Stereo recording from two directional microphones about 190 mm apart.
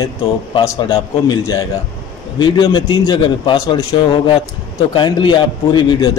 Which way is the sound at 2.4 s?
25° left (ahead or behind).